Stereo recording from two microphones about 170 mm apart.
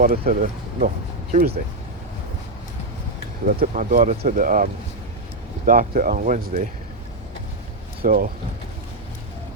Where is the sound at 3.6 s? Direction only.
55° right (ahead or behind).